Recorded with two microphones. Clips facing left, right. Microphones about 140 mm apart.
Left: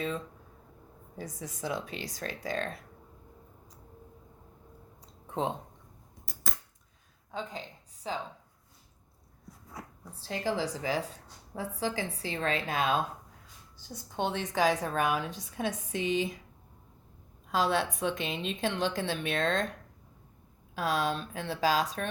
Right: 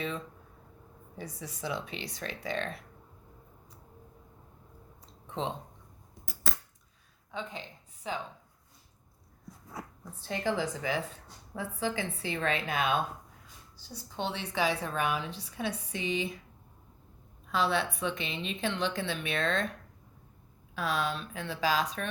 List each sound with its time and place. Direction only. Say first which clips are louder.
1.1 s a woman's voice: left 1 dB; 45° left (ahead or behind)
5.3 s speech: left 3 dB; 50° left (ahead or behind)
7.3 s speech: left 1 dB; 35° left (ahead or behind)
10.2 s a woman's voice: even; 35° left (ahead or behind)
13.9 s a woman's voice: left 3 dB; 50° left (ahead or behind)
17.5 s a woman's voice: left 1 dB; 45° left (ahead or behind)
20.7 s a woman's voice: left 2 dB; 40° left (ahead or behind)